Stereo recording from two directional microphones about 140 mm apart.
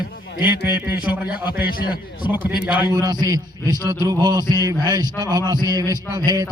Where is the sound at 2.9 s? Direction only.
30° right (ahead or behind).